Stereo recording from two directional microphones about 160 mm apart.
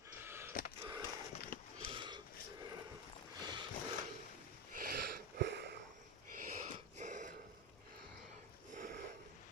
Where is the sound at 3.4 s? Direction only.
30° right (ahead or behind).